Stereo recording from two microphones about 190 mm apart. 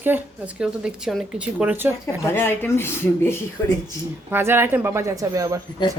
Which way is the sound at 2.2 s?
10° left (ahead or behind).